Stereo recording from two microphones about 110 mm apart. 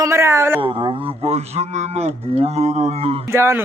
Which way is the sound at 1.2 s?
75° right (ahead or behind).